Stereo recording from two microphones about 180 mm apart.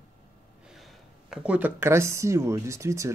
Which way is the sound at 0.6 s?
Centre (ahead or behind).